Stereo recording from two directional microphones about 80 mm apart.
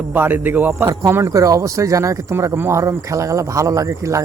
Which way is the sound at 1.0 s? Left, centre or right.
Right.